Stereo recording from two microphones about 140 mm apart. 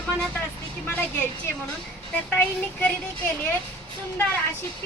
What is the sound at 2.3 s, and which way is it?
Speech, 15° left (ahead or behind).